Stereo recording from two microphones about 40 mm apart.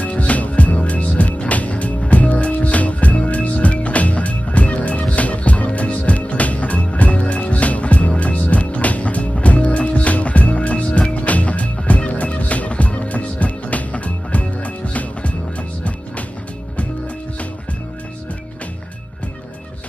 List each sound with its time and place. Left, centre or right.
0.0 s music: left